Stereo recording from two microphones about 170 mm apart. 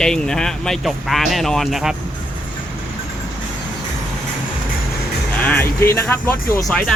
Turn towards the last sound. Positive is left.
turn(degrees=15)  # may be behind; listen again after turning